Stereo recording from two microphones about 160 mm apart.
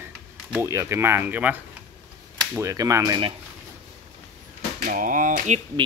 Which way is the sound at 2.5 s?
20° right (ahead or behind).